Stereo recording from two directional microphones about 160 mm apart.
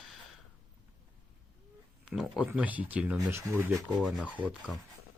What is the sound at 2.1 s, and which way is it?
Speech, 5° right (ahead or behind).